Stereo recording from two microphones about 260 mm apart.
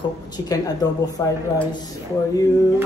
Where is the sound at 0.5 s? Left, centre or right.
Centre.